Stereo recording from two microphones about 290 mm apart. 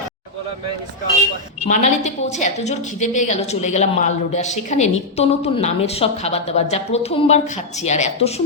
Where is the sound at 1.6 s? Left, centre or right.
Left.